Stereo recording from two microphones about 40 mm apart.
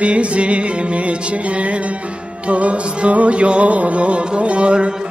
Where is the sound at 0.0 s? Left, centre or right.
Right.